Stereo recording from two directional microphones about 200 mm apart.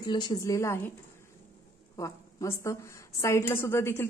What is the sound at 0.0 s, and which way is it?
Speech, 20° left (ahead or behind).